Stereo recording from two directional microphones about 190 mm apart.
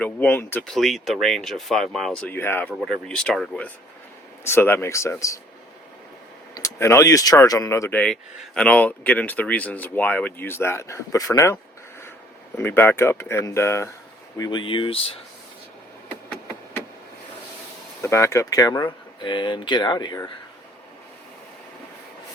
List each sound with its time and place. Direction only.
0.0 s speech: 10° left (ahead or behind)
6.6 s speech: 15° left (ahead or behind)
12.5 s speech: 10° left (ahead or behind); by 15.2 s 30° left (ahead or behind)
18.0 s speech: 15° left (ahead or behind)